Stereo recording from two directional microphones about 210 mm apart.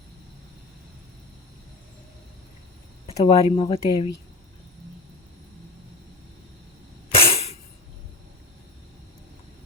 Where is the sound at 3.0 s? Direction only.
30° left (ahead or behind).